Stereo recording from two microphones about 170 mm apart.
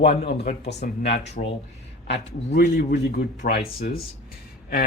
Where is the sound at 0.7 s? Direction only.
40° left (ahead or behind).